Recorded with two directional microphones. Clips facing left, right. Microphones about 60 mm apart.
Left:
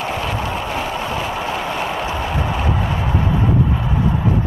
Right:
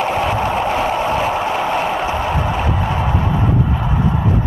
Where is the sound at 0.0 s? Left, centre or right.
Right.